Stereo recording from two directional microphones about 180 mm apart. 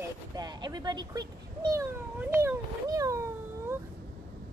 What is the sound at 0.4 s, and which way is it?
Speech, 20° right (ahead or behind).